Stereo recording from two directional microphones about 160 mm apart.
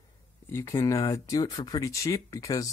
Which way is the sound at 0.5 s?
15° left (ahead or behind).